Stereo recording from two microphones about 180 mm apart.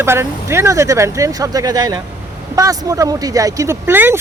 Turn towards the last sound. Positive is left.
turn(degrees=-10)  # may be behind; listen again after turning